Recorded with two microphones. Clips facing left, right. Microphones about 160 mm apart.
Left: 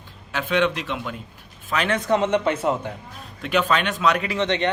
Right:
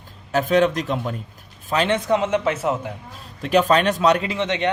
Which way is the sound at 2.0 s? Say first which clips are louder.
Even; 10° right (ahead or behind).